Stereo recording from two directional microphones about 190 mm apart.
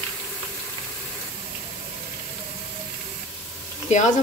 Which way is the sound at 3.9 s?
35° left (ahead or behind).